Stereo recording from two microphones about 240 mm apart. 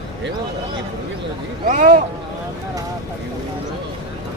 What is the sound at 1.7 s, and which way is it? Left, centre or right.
Speech, right.